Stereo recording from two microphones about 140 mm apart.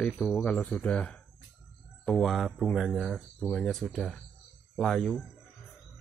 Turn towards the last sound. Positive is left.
turn(degrees=0)  # may be behind; listen again after turning